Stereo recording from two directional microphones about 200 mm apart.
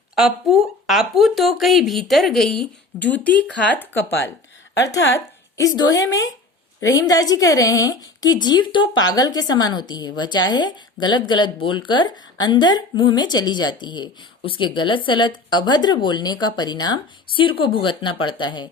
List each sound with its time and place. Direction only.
0.2 s speech: centre (ahead or behind)
4.9 s a woman's voice: 15° left (ahead or behind)